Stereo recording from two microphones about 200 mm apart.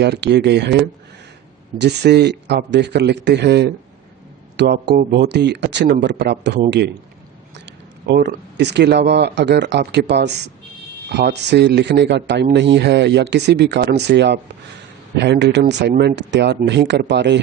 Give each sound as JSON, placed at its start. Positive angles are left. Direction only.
{"t": 0.0, "sound": "speech", "side_deg": -55}
{"t": 1.8, "sound": "speech", "side_deg": -55}